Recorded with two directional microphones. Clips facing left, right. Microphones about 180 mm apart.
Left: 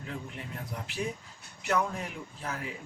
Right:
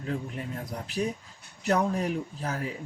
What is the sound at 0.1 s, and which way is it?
Speech, 40° right (ahead or behind).